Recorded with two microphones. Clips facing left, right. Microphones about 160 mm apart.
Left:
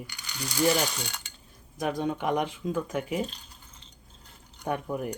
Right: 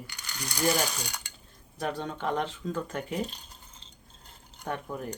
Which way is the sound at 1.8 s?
10° left (ahead or behind).